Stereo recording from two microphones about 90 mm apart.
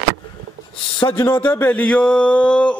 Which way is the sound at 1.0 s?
45° left (ahead or behind).